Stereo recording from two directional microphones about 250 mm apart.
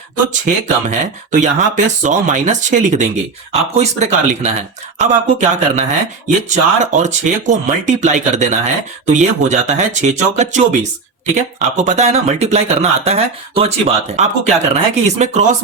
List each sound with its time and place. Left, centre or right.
0.4 s speech: right